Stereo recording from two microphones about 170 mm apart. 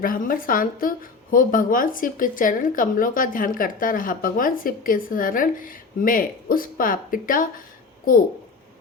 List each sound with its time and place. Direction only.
0.0 s a woman's voice: 55° left (ahead or behind)